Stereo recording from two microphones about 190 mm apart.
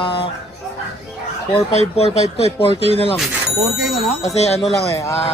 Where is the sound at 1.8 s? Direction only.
30° left (ahead or behind).